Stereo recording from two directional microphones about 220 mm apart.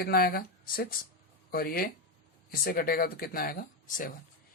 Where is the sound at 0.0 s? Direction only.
45° left (ahead or behind).